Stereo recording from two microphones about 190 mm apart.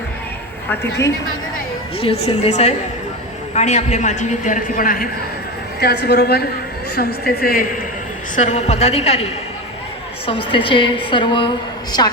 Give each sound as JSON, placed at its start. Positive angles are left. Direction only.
{"t": 0.7, "sound": "a woman's voice", "side_deg": 15}
{"t": 2.2, "sound": "a man's voice", "side_deg": 35}
{"t": 5.8, "sound": "a woman's voice", "side_deg": 60}
{"t": 8.4, "sound": "a man's voice", "side_deg": 35}